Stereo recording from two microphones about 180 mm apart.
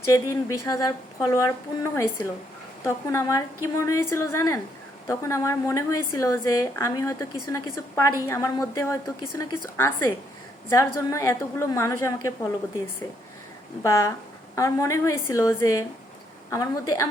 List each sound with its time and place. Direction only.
0.0 s a woman's voice: 20° left (ahead or behind)
13.8 s a woman's voice: 15° left (ahead or behind)